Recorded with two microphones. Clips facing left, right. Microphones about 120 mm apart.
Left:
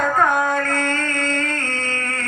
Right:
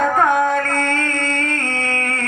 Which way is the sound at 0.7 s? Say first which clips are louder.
Right 2 dB; 60° right (ahead or behind).